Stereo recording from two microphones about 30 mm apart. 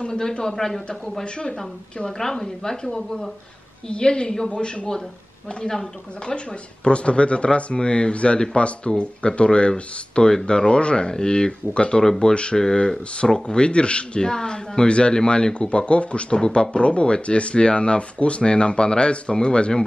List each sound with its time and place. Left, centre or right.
0.3 s speech: left
2.0 s speech: centre; by 4.8 s left
6.2 s speech: left
12.0 s speech: left
12.4 s speech: left
16.3 s speech: left
16.7 s speech: left